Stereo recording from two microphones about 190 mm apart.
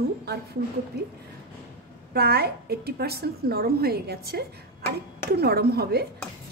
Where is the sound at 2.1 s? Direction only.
55° right (ahead or behind).